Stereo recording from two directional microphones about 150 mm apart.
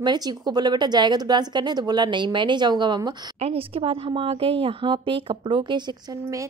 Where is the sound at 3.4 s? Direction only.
40° right (ahead or behind); by 6.5 s 25° right (ahead or behind).